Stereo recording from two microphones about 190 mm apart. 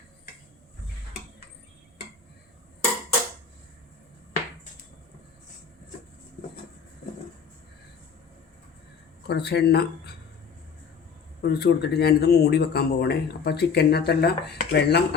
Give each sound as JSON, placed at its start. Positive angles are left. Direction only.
{"t": 9.2, "sound": "speech", "side_deg": 60}
{"t": 11.4, "sound": "speech", "side_deg": 60}